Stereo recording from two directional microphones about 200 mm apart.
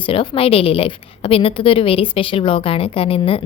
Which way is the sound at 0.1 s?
30° left (ahead or behind).